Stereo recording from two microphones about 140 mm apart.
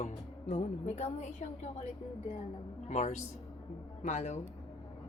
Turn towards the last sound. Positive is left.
turn(degrees=55)  # may be behind; listen again after turning